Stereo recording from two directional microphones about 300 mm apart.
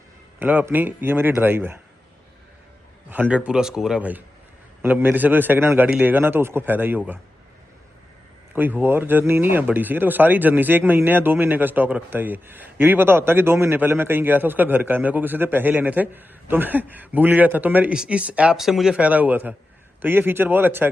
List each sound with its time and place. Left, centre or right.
0.3 s a man's voice: centre
3.1 s a man's voice: centre
8.5 s a man's voice: centre